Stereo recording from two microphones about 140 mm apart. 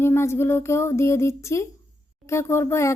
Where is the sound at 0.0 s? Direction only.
20° left (ahead or behind).